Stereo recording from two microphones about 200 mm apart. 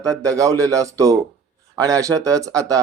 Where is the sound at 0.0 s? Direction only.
15° right (ahead or behind).